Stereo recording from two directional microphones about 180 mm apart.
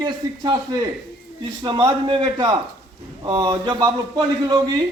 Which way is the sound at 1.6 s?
25° right (ahead or behind).